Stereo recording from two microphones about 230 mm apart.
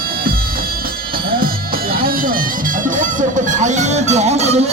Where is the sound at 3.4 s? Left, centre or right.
Right.